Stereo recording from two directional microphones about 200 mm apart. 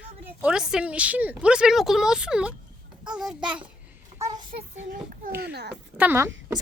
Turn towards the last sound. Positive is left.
turn(degrees=-10)  # may be behind; listen again after turning